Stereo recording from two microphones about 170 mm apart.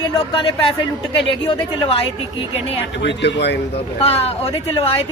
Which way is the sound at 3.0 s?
90° left.